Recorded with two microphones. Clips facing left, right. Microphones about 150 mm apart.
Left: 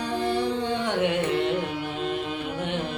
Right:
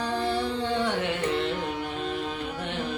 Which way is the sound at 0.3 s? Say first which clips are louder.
Left 5 dB; 55° left (ahead or behind).